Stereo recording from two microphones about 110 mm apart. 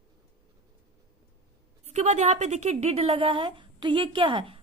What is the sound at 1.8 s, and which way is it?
A woman's voice, 90° right.